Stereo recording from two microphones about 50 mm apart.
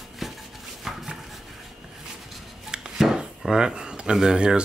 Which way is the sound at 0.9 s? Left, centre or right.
Centre.